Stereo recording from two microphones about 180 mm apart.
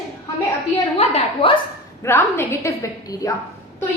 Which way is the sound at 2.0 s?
15° left (ahead or behind).